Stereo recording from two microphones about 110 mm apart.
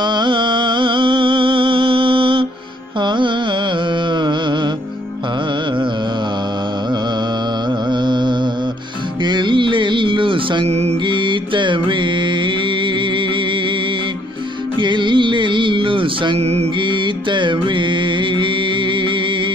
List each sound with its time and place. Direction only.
0.0 s music: 45° right (ahead or behind)
4.1 s carnatic music: 45° right (ahead or behind)
7.9 s music: 45° right (ahead or behind); by 11.0 s 75° right (ahead or behind)
11.1 s mantra: 45° right (ahead or behind)
14.8 s music: 45° right (ahead or behind); by 16.6 s 70° right (ahead or behind)
16.8 s music: 45° right (ahead or behind)